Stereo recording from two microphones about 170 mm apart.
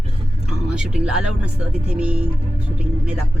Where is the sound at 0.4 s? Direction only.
5° right (ahead or behind).